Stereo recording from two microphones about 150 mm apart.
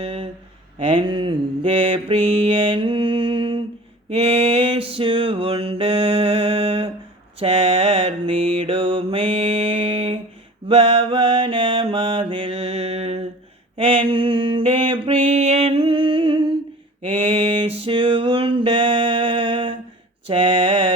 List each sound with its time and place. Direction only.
0.0 s speech: 40° right (ahead or behind)
1.8 s mantra: 40° right (ahead or behind)
17.6 s music: 35° right (ahead or behind)
20.2 s mantra: 35° right (ahead or behind)